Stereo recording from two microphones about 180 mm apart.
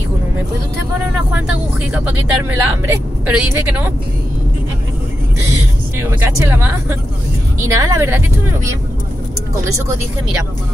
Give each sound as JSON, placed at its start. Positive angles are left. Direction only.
{"t": 1.9, "sound": "speech", "side_deg": -10}
{"t": 5.9, "sound": "speech", "side_deg": -15}